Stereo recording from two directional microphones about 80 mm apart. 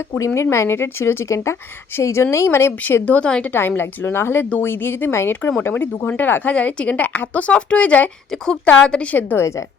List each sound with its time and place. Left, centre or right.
0.5 s speech: left
2.8 s a woman's voice: left
3.5 s a woman's voice: left
9.1 s speech: left